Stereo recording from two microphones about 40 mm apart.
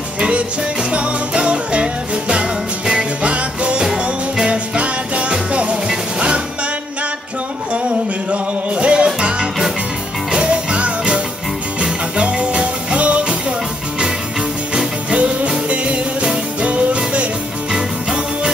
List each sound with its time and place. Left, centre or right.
0.9 s music: right
8.3 s music: right
14.7 s music: right
17.7 s music: centre